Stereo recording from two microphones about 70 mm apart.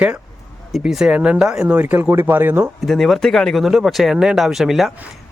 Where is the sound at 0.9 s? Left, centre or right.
Centre.